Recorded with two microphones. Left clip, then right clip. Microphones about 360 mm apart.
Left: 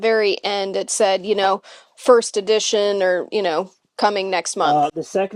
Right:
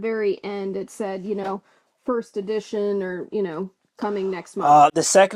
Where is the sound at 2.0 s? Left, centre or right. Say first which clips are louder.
Left 11 dB; left.